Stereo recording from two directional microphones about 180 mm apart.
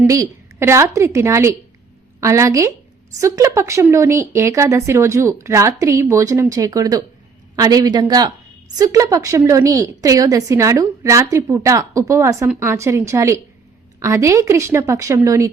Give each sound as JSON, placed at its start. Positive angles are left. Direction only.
{"t": 0.1, "sound": "speech", "side_deg": -15}